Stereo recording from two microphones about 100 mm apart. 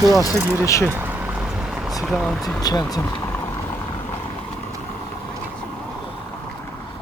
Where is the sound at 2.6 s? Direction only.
40° left (ahead or behind).